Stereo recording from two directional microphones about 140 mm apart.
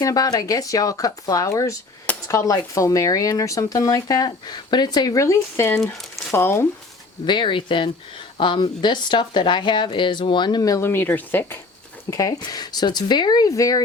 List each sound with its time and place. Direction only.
0.0 s speech: 25° left (ahead or behind)
7.3 s speech: 35° left (ahead or behind); by 11.6 s 15° left (ahead or behind)
12.1 s speech: 25° left (ahead or behind)